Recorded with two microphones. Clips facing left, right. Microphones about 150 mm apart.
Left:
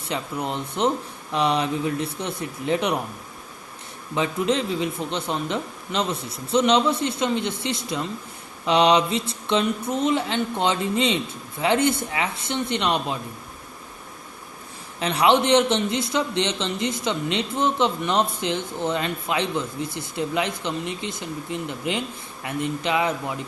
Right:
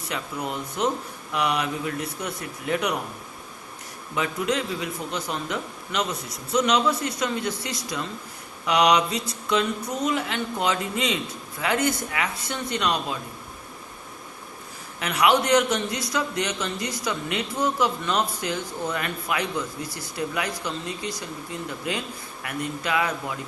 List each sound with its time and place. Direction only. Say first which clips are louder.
0.0 s a man's voice: left 3 dB; 25° left (ahead or behind)
4.1 s a man's voice: left 3 dB; 30° left (ahead or behind)
14.9 s a man's voice: left 2 dB; 30° left (ahead or behind)